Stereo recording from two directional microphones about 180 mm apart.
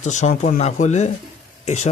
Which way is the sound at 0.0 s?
40° left (ahead or behind).